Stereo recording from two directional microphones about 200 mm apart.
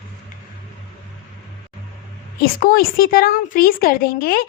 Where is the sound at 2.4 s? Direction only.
45° left (ahead or behind).